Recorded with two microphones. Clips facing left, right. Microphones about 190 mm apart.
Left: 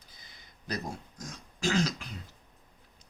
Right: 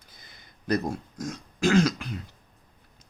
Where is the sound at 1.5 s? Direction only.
60° right (ahead or behind).